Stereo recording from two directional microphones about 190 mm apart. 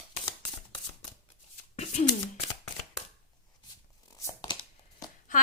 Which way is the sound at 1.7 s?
35° left (ahead or behind).